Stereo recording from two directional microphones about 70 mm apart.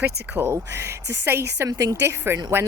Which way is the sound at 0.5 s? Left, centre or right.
Right.